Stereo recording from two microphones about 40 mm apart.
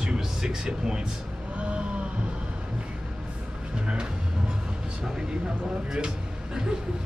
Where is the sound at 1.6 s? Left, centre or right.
Right.